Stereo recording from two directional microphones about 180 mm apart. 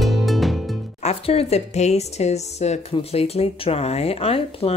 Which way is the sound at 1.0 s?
35° left (ahead or behind).